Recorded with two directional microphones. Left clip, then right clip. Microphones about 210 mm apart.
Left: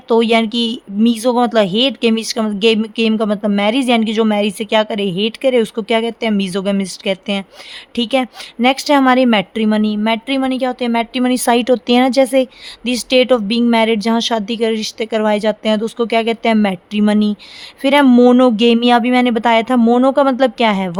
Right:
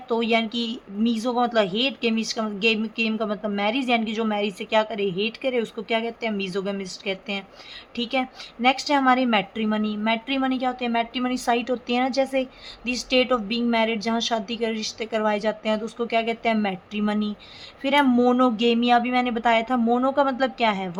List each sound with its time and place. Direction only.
0.1 s speech: 55° left (ahead or behind)